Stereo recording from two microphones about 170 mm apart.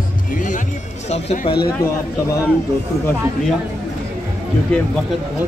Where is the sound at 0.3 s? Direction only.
50° left (ahead or behind).